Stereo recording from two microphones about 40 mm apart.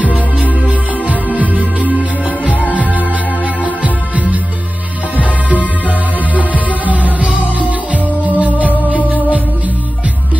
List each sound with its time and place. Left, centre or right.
0.7 s music: right
5.6 s music: left
6.8 s music: right